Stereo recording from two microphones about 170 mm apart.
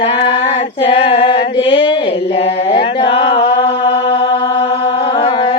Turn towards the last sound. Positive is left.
turn(degrees=25)  # may be behind; listen again after turning